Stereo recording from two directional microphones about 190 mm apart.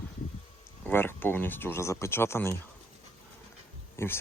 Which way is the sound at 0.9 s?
10° left (ahead or behind).